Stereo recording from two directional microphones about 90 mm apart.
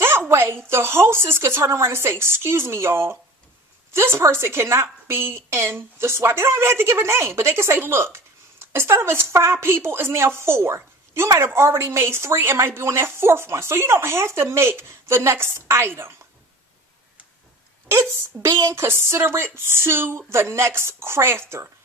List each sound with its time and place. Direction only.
0.3 s a woman's voice: 25° right (ahead or behind)
17.8 s a woman's voice: 25° right (ahead or behind)